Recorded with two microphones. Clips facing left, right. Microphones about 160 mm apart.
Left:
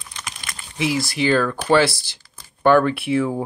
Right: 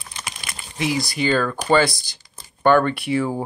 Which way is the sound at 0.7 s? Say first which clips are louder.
Left 1 dB; centre (ahead or behind).